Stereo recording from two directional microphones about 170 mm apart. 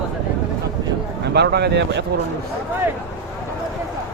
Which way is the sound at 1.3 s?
75° right (ahead or behind).